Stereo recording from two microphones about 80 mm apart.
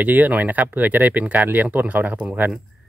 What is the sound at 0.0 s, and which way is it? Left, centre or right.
Speech, right.